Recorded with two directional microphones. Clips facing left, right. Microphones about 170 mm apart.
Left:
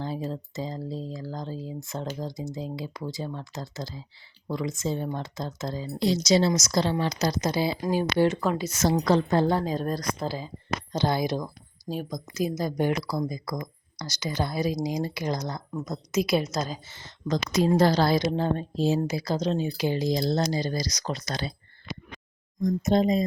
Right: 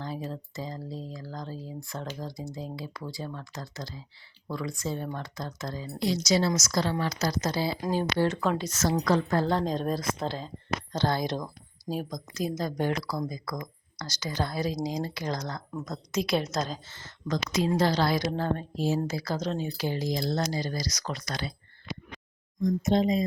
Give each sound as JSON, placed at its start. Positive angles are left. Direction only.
{"t": 0.2, "sound": "speech", "side_deg": 25}
{"t": 8.9, "sound": "speech", "side_deg": 30}
{"t": 9.5, "sound": "speech", "side_deg": 5}
{"t": 17.5, "sound": "a woman's voice", "side_deg": 45}
{"t": 18.1, "sound": "speech", "side_deg": 20}
{"t": 22.6, "sound": "a woman's voice", "side_deg": 40}